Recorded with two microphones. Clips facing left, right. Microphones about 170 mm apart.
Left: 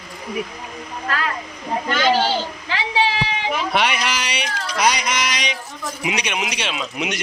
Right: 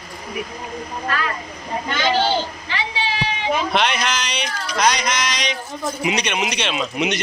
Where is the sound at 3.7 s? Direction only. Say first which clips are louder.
Right 1 dB; 10° left (ahead or behind).